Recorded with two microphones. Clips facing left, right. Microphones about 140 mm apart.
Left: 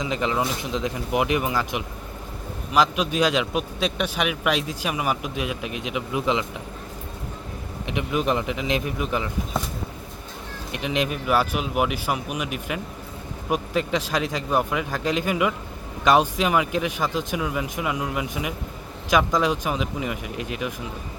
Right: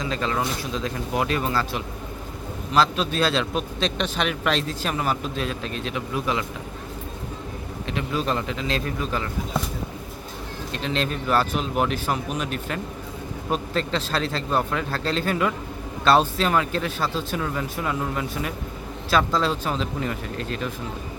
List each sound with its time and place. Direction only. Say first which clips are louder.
0.0 s a man's voice: left 1 dB; 15° left (ahead or behind)
7.9 s a man's voice: left 2 dB; 15° left (ahead or behind)
10.7 s a man's voice: left 1 dB; 15° left (ahead or behind)